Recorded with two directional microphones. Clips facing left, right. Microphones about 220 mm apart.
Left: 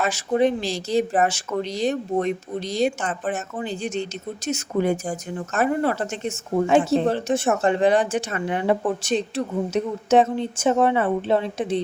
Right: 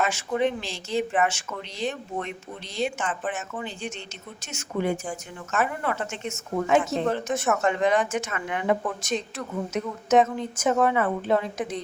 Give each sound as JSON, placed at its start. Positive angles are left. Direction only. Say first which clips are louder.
{"t": 0.0, "sound": "speech", "louder": "left 4 dB", "side_deg": 35}